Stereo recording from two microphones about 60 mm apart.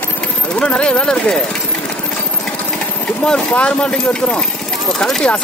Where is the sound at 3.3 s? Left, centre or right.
Centre.